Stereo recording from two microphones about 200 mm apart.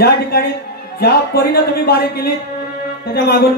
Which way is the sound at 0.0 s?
50° left (ahead or behind).